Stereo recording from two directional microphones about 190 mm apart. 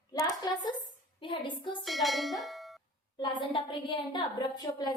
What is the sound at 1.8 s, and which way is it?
Bell, centre (ahead or behind).